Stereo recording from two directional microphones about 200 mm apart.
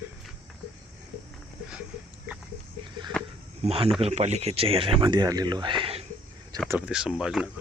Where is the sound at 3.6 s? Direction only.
30° right (ahead or behind).